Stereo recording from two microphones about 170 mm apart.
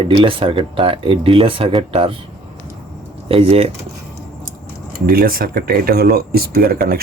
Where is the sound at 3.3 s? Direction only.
35° right (ahead or behind).